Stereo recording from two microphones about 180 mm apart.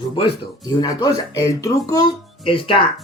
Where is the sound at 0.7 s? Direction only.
20° left (ahead or behind).